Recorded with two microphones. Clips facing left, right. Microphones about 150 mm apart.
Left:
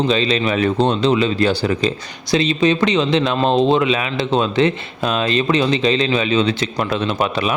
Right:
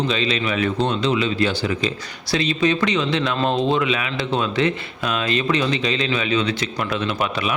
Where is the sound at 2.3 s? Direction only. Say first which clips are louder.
Left 4 dB; 25° left (ahead or behind).